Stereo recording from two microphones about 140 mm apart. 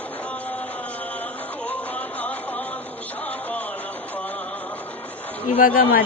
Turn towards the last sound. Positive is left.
turn(degrees=75)  # may be behind; listen again after turning